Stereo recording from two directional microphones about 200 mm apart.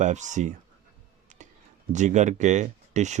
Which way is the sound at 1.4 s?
35° right (ahead or behind).